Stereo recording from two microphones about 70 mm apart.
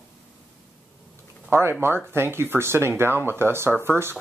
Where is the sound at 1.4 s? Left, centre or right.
Right.